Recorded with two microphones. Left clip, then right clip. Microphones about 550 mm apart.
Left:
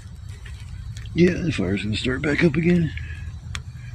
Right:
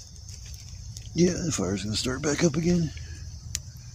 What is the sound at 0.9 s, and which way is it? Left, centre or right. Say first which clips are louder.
Speech: left 5 dB; right.